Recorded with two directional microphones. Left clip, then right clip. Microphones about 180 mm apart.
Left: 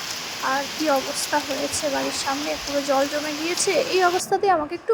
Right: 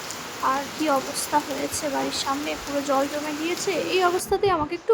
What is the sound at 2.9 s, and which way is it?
Speech, 15° left (ahead or behind).